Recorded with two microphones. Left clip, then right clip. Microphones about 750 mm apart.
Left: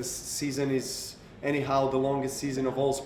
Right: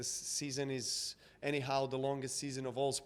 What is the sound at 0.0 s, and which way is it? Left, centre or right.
Speech, right.